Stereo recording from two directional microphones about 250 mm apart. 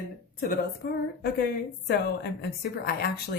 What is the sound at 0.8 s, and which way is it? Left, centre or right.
Speech, left.